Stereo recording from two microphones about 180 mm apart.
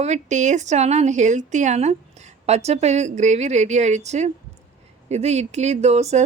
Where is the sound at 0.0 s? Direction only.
40° right (ahead or behind).